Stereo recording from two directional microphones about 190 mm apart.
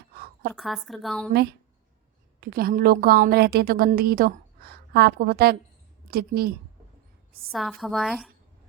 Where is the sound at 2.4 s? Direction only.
50° right (ahead or behind).